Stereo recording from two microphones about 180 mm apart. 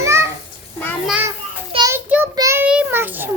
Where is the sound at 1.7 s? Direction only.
20° right (ahead or behind).